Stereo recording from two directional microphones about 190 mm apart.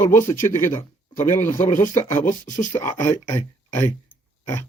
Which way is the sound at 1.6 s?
40° left (ahead or behind).